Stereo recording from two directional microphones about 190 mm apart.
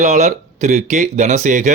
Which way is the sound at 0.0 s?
40° right (ahead or behind).